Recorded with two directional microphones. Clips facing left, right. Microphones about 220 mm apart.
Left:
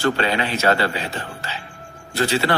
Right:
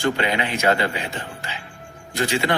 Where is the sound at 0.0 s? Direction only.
15° right (ahead or behind).